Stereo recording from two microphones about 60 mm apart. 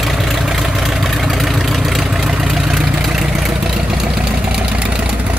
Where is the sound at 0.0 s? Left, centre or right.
Centre.